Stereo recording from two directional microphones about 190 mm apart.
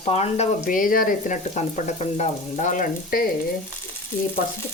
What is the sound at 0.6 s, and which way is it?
Frying, 45° left (ahead or behind).